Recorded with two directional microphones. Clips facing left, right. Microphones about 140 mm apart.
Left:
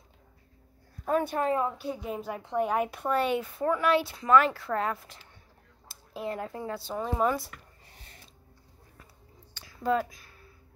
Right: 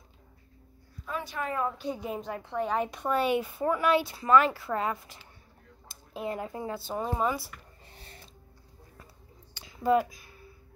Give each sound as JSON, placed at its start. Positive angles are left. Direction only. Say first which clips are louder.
{"t": 1.0, "sound": "speech", "louder": "left 9 dB", "side_deg": 45}
{"t": 1.4, "sound": "a woman's voice", "louder": "left 4 dB", "side_deg": 25}
{"t": 1.8, "sound": "speech", "louder": "even", "side_deg": 5}
{"t": 2.3, "sound": "a woman's voice", "louder": "left 3 dB", "side_deg": 15}
{"t": 7.8, "sound": "a sound", "louder": "right 4 dB", "side_deg": -30}
{"t": 9.5, "sound": "a sound", "louder": "right 3 dB", "side_deg": -15}